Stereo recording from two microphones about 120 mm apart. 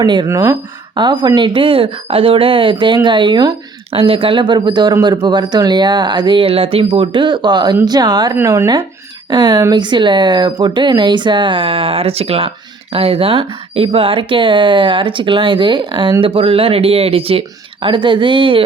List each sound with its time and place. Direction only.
0.0 s speech: 40° right (ahead or behind)
0.3 s speech: 25° right (ahead or behind)
0.9 s speech: 40° right (ahead or behind)
3.9 s speech: 50° right (ahead or behind)